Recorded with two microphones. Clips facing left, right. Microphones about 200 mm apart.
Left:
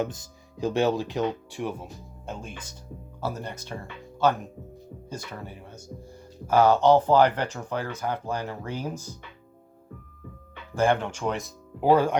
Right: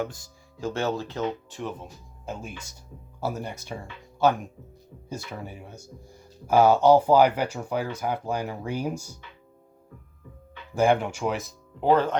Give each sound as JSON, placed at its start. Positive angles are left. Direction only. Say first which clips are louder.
{"t": 0.0, "sound": "speech", "louder": "left 2 dB", "side_deg": 20}
{"t": 2.2, "sound": "speech", "louder": "right 2 dB", "side_deg": -5}
{"t": 10.8, "sound": "speech", "louder": "right 2 dB", "side_deg": -10}